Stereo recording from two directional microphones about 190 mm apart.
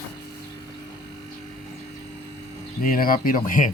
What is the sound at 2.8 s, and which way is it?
Speech, 50° left (ahead or behind).